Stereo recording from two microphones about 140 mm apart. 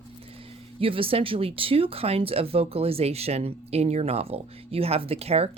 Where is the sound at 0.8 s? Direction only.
40° right (ahead or behind).